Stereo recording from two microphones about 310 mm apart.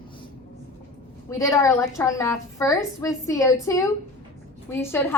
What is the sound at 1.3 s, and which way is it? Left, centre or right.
A woman's voice, centre.